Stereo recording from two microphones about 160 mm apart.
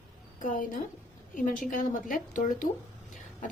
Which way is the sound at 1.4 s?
55° left (ahead or behind).